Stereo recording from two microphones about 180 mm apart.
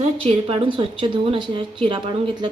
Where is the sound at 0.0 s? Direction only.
30° right (ahead or behind).